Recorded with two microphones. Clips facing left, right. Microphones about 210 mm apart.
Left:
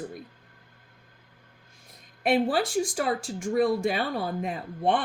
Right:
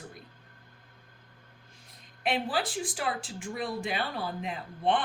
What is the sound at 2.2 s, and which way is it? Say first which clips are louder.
Speech: left 7 dB; 45° left (ahead or behind).